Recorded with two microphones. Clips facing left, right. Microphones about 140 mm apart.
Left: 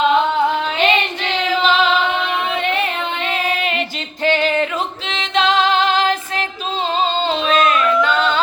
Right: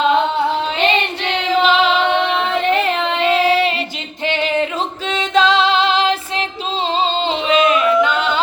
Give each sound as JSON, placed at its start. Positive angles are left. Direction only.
{"t": 1.6, "sound": "music", "side_deg": -20}
{"t": 3.4, "sound": "female singing", "side_deg": -90}
{"t": 5.1, "sound": "female singing", "side_deg": -35}
{"t": 7.3, "sound": "singing", "side_deg": -15}